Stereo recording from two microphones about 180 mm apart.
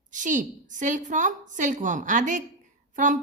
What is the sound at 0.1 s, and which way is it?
A woman's voice, 45° right (ahead or behind).